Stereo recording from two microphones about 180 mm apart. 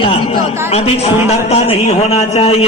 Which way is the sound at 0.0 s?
35° left (ahead or behind).